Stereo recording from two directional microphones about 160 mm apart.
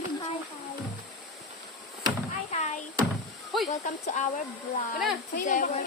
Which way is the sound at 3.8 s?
50° left (ahead or behind).